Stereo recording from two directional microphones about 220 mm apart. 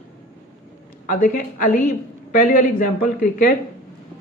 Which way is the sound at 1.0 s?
40° left (ahead or behind).